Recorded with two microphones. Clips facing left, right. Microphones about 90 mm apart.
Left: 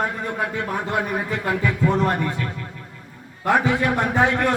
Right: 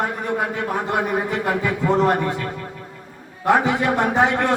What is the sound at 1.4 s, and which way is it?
Speech, 20° right (ahead or behind).